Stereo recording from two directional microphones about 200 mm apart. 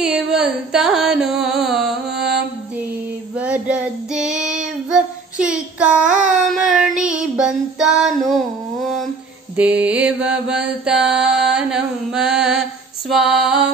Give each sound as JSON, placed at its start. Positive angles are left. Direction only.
{"t": 0.0, "sound": "carnatic music", "side_deg": -5}
{"t": 3.3, "sound": "child singing", "side_deg": -5}
{"t": 6.1, "sound": "a sound", "side_deg": -40}
{"t": 7.0, "sound": "child singing", "side_deg": -5}
{"t": 9.6, "sound": "mantra", "side_deg": -5}